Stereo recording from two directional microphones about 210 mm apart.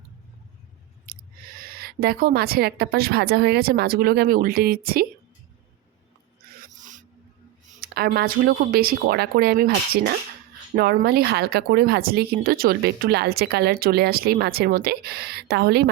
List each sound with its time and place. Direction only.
1.0 s a woman's voice: 45° right (ahead or behind)
6.6 s filing: 35° right (ahead or behind)
7.8 s speech: 45° right (ahead or behind)